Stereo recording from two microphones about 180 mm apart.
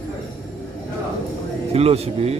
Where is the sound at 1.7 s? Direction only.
35° right (ahead or behind).